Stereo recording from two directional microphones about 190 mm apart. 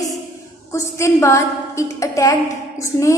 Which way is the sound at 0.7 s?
15° left (ahead or behind).